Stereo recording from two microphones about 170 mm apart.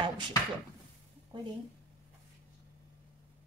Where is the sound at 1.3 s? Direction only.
25° right (ahead or behind).